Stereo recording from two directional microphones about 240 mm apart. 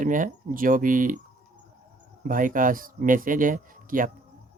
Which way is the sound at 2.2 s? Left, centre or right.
Right.